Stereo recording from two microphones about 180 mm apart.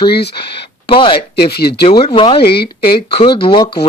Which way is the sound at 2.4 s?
60° left (ahead or behind).